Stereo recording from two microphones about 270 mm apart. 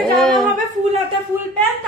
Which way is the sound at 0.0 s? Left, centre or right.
Centre.